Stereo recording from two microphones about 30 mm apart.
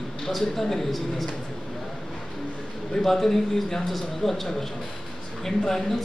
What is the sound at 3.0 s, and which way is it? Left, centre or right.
A man's voice, centre.